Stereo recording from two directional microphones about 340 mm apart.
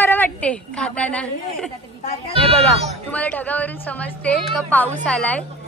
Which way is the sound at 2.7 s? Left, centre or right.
Centre.